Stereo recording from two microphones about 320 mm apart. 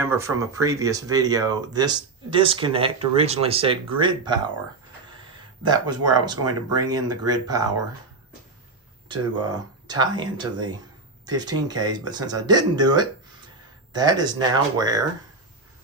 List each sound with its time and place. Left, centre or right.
0.0 s speech: centre
5.6 s speech: centre
9.0 s speech: centre